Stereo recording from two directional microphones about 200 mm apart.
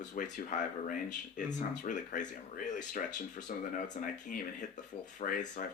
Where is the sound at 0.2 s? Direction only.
40° left (ahead or behind).